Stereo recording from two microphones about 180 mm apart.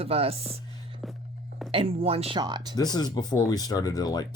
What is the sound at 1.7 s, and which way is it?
Speech, 35° right (ahead or behind).